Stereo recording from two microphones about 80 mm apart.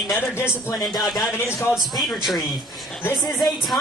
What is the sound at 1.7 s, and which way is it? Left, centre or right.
Speech, centre.